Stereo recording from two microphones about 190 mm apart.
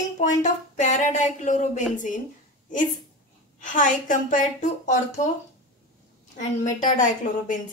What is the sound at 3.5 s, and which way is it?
Speech, 40° left (ahead or behind).